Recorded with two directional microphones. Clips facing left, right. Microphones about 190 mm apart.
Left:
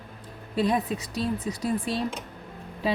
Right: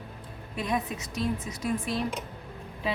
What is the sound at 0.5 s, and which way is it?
A woman's voice, 35° left (ahead or behind).